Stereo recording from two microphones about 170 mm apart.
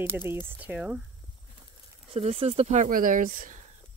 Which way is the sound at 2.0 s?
35° right (ahead or behind).